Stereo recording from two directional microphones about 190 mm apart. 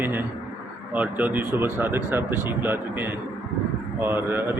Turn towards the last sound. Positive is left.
turn(degrees=-10)  # may be behind; listen again after turning